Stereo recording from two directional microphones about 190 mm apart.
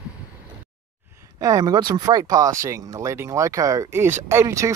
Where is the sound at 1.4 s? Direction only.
20° right (ahead or behind).